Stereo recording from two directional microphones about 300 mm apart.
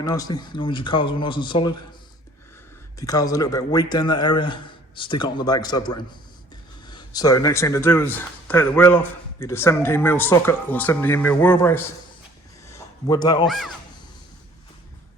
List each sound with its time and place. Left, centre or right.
0.0 s a man's voice: centre
3.0 s a man's voice: centre
12.6 s a sound: centre
13.5 s a man's voice: centre